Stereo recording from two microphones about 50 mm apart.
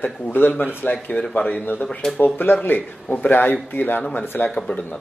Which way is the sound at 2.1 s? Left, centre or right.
Left.